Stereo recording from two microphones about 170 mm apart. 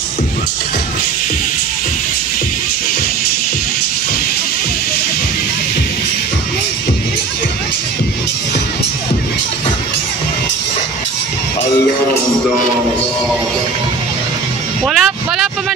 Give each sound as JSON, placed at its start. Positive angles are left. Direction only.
{"t": 14.9, "sound": "speech", "side_deg": 0}